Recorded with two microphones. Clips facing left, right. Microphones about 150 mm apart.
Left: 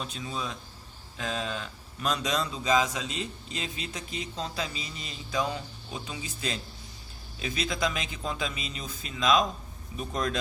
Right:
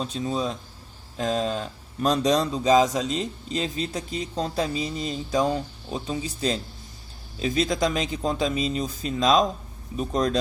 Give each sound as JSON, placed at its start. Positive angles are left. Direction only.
{"t": 0.0, "sound": "speech", "side_deg": -35}